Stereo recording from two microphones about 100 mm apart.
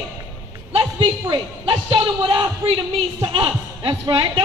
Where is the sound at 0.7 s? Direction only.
55° right (ahead or behind).